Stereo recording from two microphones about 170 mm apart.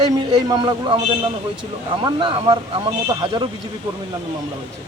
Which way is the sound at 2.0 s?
30° right (ahead or behind).